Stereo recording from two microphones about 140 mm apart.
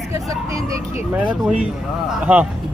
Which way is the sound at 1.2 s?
10° right (ahead or behind).